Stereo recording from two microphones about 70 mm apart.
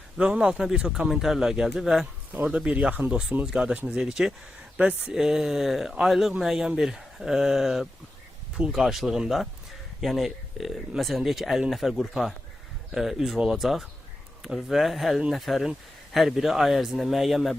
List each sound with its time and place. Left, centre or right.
0.2 s speech: centre
4.8 s speech: centre
5.1 s speech: centre